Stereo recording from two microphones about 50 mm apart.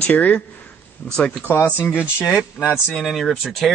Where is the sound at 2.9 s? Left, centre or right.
Centre.